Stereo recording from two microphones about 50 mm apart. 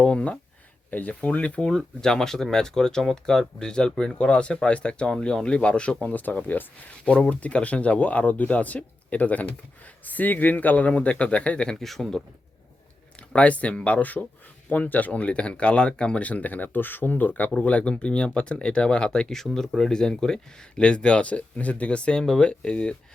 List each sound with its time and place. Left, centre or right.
0.0 s speech: left
0.9 s speech: left
2.0 s speech: centre; by 6.7 s left
7.0 s speech: left
11.8 s speech: centre
13.3 s speech: left